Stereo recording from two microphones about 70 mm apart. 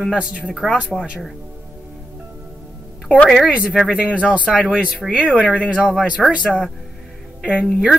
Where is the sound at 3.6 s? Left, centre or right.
Centre.